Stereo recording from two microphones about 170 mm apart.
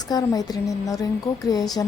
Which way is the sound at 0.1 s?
20° left (ahead or behind).